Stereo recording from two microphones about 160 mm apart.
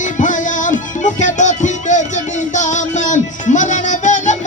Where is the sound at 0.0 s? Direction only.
50° left (ahead or behind).